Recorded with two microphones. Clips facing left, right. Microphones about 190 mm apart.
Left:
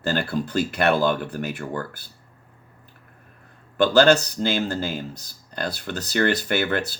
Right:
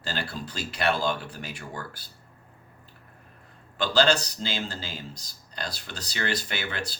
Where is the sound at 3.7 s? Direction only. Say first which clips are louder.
Left 7 dB; 55° left (ahead or behind).